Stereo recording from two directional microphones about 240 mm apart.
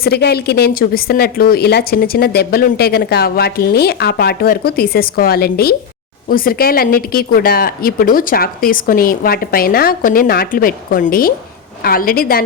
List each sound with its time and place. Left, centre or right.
0.0 s a woman's voice: left